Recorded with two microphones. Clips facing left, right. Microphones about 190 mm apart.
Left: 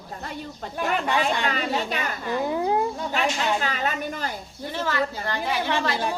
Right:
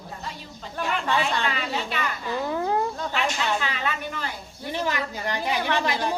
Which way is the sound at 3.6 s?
40° left (ahead or behind).